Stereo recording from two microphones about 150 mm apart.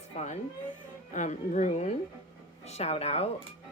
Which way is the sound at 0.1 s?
45° left (ahead or behind).